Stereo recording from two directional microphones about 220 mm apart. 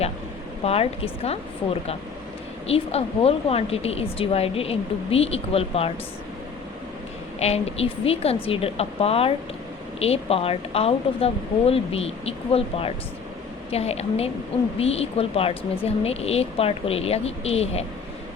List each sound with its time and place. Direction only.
0.6 s speech: 25° left (ahead or behind)
2.6 s speech: 25° left (ahead or behind)
7.3 s speech: 30° left (ahead or behind)